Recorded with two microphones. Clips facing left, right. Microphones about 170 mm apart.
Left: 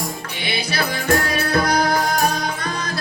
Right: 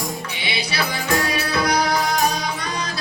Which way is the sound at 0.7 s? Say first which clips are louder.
Left 3 dB; 50° left (ahead or behind).